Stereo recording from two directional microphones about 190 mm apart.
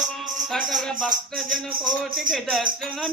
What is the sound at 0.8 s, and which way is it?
Mantra, 5° left (ahead or behind).